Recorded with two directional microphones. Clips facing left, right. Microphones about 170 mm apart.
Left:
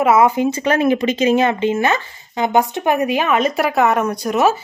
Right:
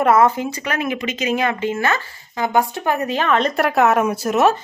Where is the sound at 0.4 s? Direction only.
25° left (ahead or behind); by 4.6 s centre (ahead or behind).